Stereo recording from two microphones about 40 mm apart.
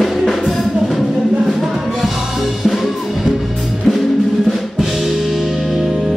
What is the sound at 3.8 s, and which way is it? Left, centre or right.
Music, centre.